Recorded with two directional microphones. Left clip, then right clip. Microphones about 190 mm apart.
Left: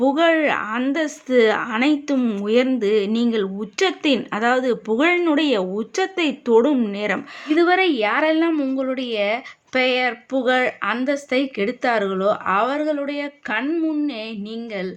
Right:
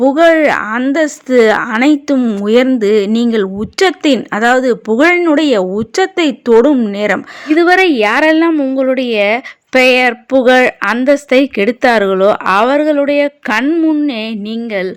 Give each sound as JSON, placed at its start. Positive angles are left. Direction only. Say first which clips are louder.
{"t": 0.0, "sound": "a woman's voice", "louder": "right 9 dB", "side_deg": -30}